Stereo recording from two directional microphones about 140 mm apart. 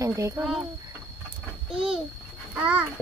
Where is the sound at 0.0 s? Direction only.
20° right (ahead or behind).